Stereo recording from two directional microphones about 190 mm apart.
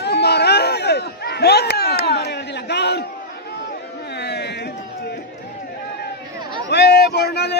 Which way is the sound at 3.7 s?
60° left (ahead or behind).